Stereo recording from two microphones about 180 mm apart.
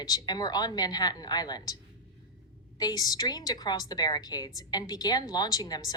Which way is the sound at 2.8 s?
20° left (ahead or behind).